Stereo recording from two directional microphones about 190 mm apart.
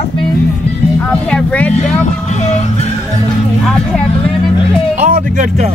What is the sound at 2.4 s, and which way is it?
Music, 40° left (ahead or behind).